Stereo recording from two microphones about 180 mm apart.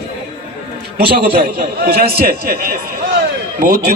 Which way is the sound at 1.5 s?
55° right (ahead or behind).